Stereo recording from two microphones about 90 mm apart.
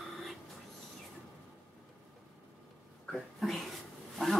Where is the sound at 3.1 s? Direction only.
5° left (ahead or behind).